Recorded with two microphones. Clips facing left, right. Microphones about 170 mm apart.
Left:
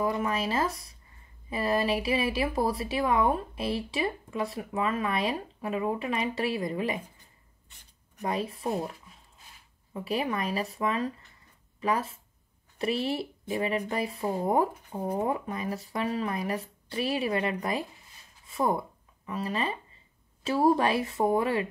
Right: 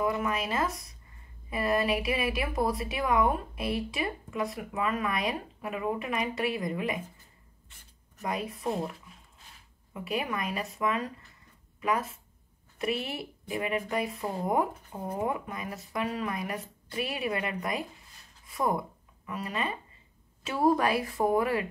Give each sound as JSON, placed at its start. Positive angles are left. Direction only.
{"t": 0.0, "sound": "speech", "side_deg": 30}
{"t": 8.2, "sound": "speech", "side_deg": 30}
{"t": 9.9, "sound": "speech", "side_deg": 30}